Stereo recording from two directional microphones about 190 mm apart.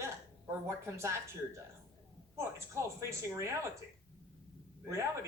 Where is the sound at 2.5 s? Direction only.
15° right (ahead or behind).